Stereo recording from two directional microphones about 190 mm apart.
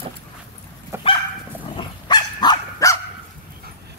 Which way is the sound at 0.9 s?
15° right (ahead or behind).